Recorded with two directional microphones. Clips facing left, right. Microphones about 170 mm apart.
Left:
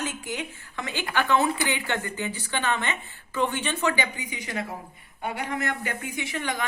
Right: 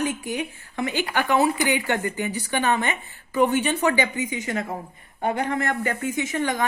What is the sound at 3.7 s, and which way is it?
Speech, 40° right (ahead or behind).